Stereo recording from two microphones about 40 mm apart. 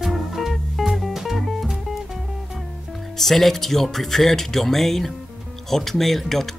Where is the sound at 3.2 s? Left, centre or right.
Centre.